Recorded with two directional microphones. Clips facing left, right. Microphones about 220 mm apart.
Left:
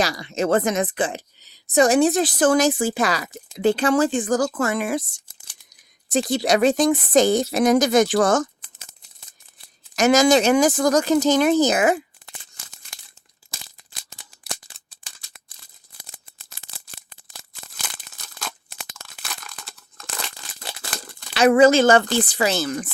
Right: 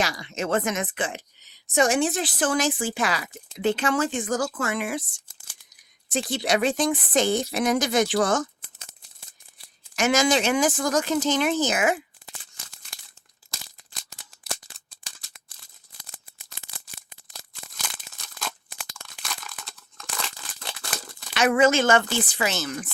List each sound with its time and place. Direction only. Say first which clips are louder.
0.0 s speech: left 5 dB; 35° left (ahead or behind)
9.9 s speech: left 6 dB; 40° left (ahead or behind)
18.3 s tearing: even; centre (ahead or behind)
21.3 s speech: left 6 dB; 35° left (ahead or behind)